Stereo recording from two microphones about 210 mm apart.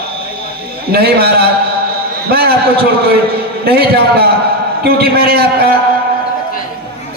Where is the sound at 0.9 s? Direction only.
45° right (ahead or behind).